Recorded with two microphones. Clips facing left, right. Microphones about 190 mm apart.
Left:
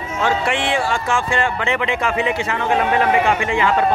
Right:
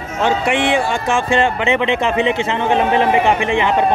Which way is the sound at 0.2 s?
20° right (ahead or behind).